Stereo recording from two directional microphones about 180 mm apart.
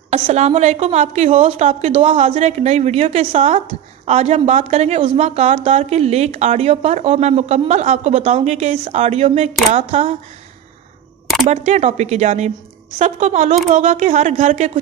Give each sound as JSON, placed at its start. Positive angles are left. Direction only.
{"t": 0.1, "sound": "a woman's voice", "side_deg": -35}
{"t": 11.4, "sound": "a woman's voice", "side_deg": -40}